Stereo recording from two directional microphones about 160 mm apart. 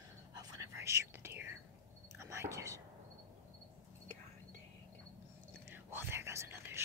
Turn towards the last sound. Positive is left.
turn(degrees=-15)  # may be behind; listen again after turning